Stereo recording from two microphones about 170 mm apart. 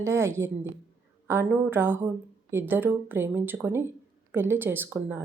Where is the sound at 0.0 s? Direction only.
15° right (ahead or behind).